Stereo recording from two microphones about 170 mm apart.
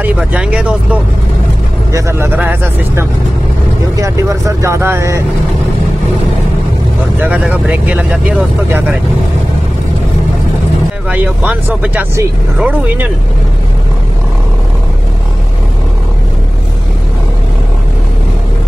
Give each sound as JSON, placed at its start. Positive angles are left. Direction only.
{"t": 0.0, "sound": "speech", "side_deg": -10}
{"t": 1.9, "sound": "speech", "side_deg": -15}
{"t": 7.2, "sound": "speech", "side_deg": -10}
{"t": 11.1, "sound": "speech", "side_deg": -10}